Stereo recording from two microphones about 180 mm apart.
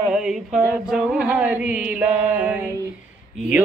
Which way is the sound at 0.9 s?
Centre (ahead or behind).